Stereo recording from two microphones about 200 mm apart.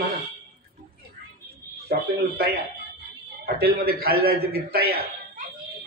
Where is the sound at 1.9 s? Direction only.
50° right (ahead or behind).